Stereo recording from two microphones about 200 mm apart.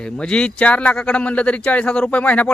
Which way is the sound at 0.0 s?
5° left (ahead or behind).